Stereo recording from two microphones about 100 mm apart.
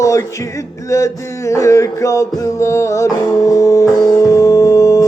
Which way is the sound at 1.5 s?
30° left (ahead or behind).